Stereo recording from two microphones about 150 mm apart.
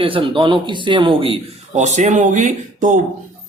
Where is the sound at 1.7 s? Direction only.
50° right (ahead or behind).